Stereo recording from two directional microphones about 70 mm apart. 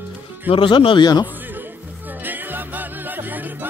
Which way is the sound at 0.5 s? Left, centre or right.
Left.